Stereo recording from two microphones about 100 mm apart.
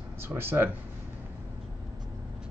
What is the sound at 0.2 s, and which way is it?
Speech, 25° right (ahead or behind).